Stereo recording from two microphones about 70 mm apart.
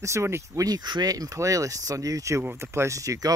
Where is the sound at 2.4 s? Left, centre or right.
Right.